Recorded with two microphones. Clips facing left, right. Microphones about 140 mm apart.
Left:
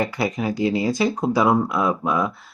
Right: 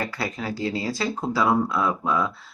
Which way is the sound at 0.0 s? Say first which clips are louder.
Left 6 dB; 20° left (ahead or behind).